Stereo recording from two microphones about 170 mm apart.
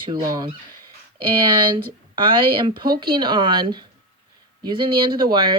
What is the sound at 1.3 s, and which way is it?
Speech, 30° right (ahead or behind).